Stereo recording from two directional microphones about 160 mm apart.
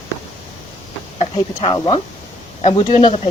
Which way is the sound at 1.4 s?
30° left (ahead or behind).